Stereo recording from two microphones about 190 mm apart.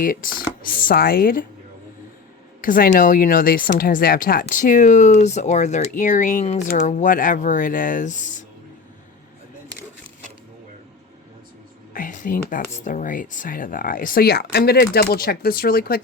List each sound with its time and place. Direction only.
0.0 s speech: 45° left (ahead or behind)
2.6 s speech: 50° left (ahead or behind)
11.9 s speech: 45° left (ahead or behind)